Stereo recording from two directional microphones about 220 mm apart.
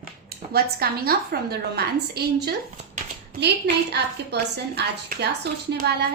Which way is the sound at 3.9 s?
50° right (ahead or behind).